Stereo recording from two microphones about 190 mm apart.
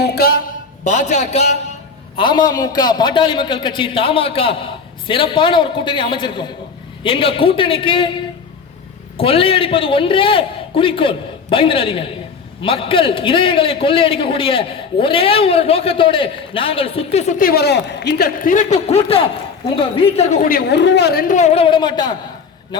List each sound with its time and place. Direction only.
0.0 s a man's voice: 55° left (ahead or behind)
0.9 s speech: 40° left (ahead or behind)
2.1 s a man's voice: 25° left (ahead or behind)
9.1 s a man's voice: 30° left (ahead or behind)